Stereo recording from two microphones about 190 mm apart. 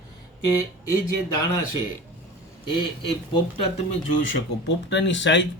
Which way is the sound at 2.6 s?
25° left (ahead or behind).